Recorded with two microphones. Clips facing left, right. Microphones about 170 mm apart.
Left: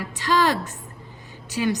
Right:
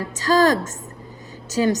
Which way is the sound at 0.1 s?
40° right (ahead or behind).